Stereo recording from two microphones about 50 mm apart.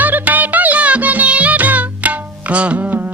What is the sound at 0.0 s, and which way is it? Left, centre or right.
Music, right.